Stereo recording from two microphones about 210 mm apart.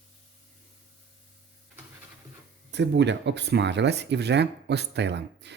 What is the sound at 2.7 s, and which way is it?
Speech, 55° right (ahead or behind).